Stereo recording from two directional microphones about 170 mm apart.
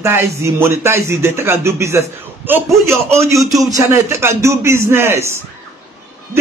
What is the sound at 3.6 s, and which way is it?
A man's voice, 20° right (ahead or behind).